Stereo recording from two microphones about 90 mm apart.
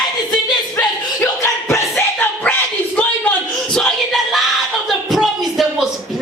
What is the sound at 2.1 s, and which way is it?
Dog, 15° left (ahead or behind).